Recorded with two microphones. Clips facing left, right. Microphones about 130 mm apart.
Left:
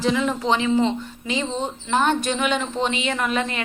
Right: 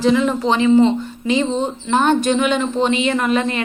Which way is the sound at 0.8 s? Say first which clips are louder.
Right 7 dB; 60° right (ahead or behind).